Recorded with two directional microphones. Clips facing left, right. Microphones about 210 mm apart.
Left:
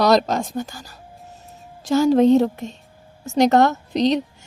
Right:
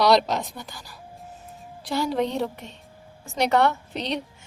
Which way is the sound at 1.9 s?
40° left (ahead or behind).